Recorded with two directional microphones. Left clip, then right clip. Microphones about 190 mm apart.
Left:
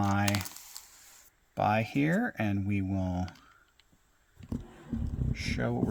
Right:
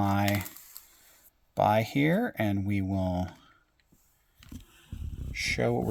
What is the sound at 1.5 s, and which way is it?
Speech, 25° right (ahead or behind).